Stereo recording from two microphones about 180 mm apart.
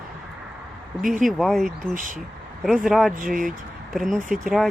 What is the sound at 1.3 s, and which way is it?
Speech, centre (ahead or behind).